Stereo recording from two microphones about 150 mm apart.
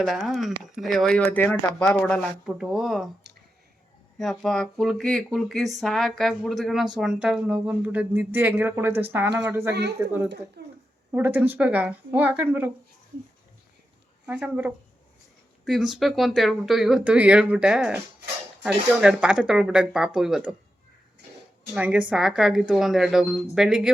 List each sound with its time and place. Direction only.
0.0 s speech: centre (ahead or behind)
2.5 s speech: 5° right (ahead or behind)
4.2 s speech: 5° left (ahead or behind); by 10.1 s 20° right (ahead or behind)
10.6 s a sound: 90° right
11.1 s speech: 10° right (ahead or behind)
14.3 s speech: 10° right (ahead or behind)
21.8 s speech: 10° right (ahead or behind)